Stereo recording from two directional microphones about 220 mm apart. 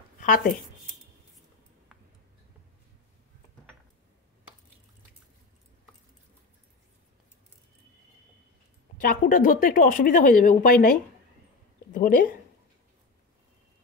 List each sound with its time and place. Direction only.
0.2 s speech: 40° left (ahead or behind)
8.9 s speech: 40° left (ahead or behind)